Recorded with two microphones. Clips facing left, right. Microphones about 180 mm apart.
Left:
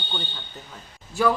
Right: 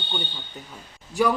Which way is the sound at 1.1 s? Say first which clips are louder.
Right 1 dB; 15° right (ahead or behind).